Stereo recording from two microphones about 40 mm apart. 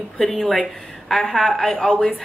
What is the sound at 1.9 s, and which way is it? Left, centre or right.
Speech, left.